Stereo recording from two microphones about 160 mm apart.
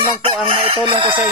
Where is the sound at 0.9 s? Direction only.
30° right (ahead or behind).